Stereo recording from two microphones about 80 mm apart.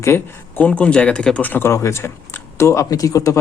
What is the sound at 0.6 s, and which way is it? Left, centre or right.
Speech, centre.